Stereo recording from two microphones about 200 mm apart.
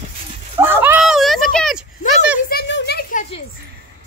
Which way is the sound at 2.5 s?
55° left (ahead or behind).